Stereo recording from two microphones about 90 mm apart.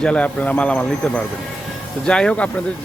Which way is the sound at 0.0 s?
10° left (ahead or behind).